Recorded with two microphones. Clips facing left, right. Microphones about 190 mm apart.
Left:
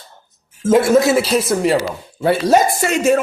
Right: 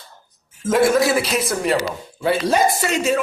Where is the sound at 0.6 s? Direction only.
25° left (ahead or behind).